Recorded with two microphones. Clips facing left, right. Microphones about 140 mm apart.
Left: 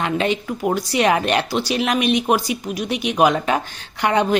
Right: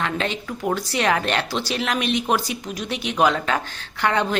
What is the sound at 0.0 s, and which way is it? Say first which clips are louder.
Speech: left 5 dB; 15° left (ahead or behind).